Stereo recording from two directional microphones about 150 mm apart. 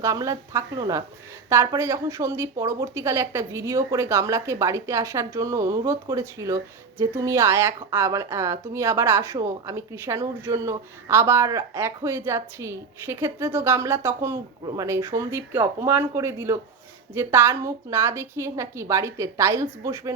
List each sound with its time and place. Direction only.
0.0 s speech: 20° right (ahead or behind)